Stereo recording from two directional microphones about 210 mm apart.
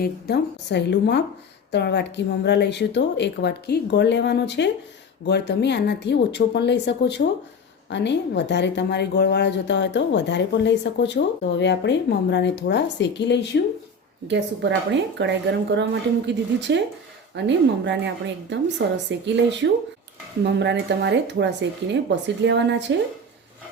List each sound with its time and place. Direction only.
0.0 s a woman's voice: 50° left (ahead or behind)
14.3 s a woman's voice: 55° right (ahead or behind)